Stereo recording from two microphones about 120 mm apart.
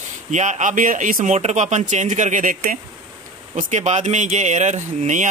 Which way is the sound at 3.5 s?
75° right (ahead or behind).